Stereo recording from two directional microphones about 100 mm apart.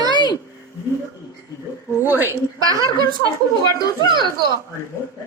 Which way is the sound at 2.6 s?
40° right (ahead or behind).